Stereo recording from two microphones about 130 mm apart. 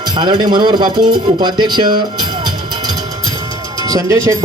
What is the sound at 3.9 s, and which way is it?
Speech, 25° right (ahead or behind).